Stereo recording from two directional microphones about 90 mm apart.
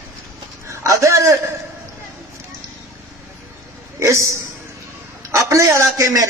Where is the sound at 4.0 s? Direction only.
35° right (ahead or behind).